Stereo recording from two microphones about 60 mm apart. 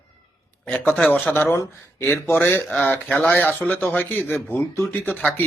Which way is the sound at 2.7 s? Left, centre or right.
Left.